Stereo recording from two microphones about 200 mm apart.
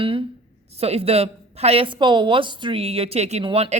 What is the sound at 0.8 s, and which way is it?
A woman's voice, 30° right (ahead or behind).